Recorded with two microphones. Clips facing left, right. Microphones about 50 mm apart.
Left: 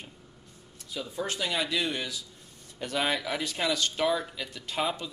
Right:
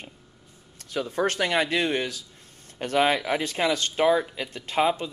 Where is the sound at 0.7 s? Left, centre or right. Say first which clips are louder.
Right 8 dB; right.